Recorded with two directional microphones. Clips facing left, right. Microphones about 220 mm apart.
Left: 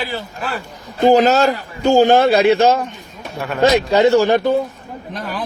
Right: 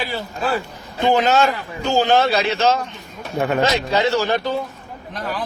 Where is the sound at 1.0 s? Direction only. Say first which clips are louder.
Left 5 dB; 40° left (ahead or behind).